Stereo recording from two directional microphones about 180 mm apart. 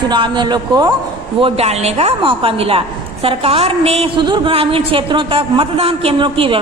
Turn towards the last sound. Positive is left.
turn(degrees=-30)  # may be behind; listen again after turning